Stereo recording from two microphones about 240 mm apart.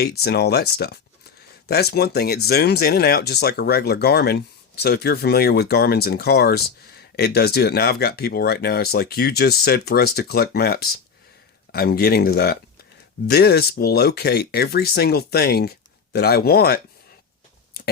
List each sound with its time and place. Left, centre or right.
0.0 s speech: left